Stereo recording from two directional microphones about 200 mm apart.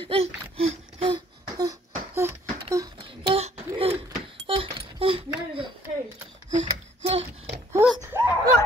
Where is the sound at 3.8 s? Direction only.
30° right (ahead or behind).